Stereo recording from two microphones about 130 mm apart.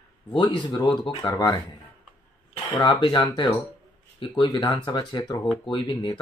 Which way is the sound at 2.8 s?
35° left (ahead or behind).